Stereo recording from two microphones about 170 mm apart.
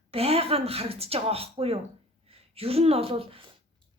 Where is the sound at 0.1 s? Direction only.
35° right (ahead or behind).